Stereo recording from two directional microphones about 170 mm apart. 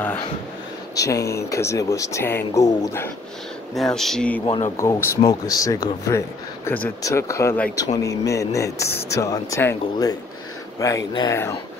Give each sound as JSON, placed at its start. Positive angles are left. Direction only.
{"t": 0.9, "sound": "speech", "side_deg": 20}
{"t": 3.7, "sound": "speech", "side_deg": 0}
{"t": 4.5, "sound": "speech", "side_deg": 20}